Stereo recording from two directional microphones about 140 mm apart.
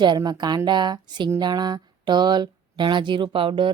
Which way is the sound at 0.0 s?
30° right (ahead or behind).